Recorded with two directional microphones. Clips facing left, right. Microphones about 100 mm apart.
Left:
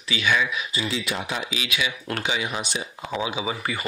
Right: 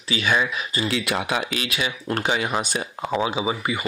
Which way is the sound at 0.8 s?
65° right (ahead or behind).